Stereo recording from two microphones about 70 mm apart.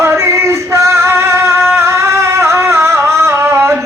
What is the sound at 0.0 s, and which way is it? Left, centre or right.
Music, right.